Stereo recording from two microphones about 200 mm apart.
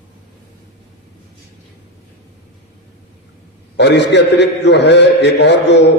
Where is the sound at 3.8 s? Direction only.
60° left (ahead or behind).